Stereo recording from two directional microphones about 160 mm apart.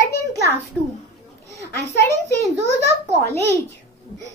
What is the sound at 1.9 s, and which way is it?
Speech, 15° left (ahead or behind).